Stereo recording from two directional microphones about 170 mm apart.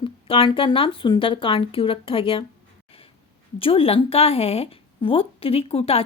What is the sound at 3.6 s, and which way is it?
A woman's voice, 35° left (ahead or behind).